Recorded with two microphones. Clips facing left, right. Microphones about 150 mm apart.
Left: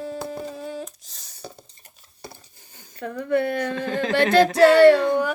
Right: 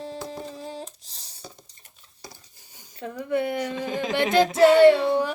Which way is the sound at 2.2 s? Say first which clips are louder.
Left 4 dB; 55° left (ahead or behind).